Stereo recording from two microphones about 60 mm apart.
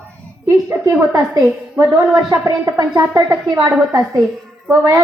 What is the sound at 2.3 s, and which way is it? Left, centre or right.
A woman's voice, right.